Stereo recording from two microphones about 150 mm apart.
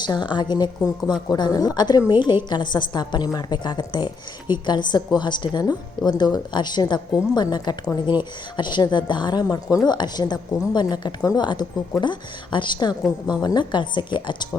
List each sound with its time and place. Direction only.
0.0 s a woman's voice: 30° left (ahead or behind)